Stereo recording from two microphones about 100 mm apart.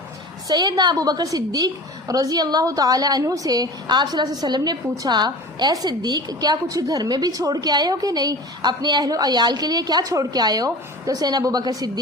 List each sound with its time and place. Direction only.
0.4 s a woman's voice: 40° right (ahead or behind)